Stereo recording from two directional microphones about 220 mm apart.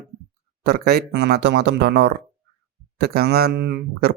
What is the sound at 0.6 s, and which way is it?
Speech, 45° right (ahead or behind).